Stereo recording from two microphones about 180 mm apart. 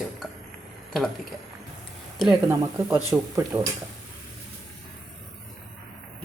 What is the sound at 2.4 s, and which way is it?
Speech, 15° right (ahead or behind).